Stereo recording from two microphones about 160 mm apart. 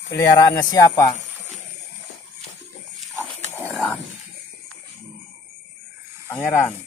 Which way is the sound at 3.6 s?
Centre (ahead or behind).